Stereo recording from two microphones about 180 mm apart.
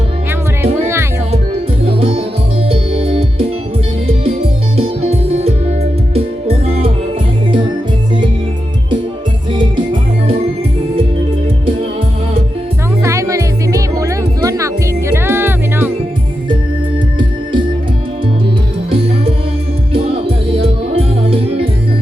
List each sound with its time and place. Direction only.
0.6 s music: 15° right (ahead or behind)
1.9 s music: 30° right (ahead or behind)
4.8 s music: 35° right (ahead or behind)
9.5 s music: 25° right (ahead or behind)
13.0 s music: 15° right (ahead or behind)
19.9 s music: 30° right (ahead or behind)